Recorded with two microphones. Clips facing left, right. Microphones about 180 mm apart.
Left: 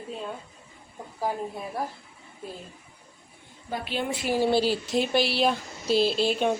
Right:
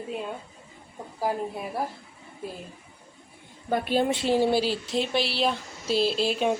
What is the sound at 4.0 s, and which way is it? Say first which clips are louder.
Speech: right 1 dB; 25° right (ahead or behind).